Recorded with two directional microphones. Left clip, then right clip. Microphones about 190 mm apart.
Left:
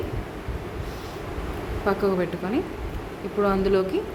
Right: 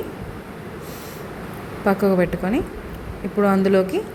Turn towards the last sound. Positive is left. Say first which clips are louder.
# right 4 dB
turn(degrees=-20)  # may be behind; listen again after turning